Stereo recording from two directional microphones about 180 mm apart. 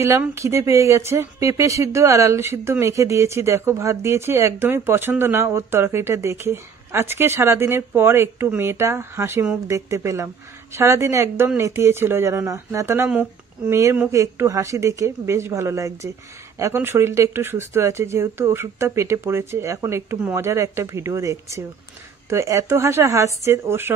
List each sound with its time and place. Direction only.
0.0 s speech: 15° right (ahead or behind)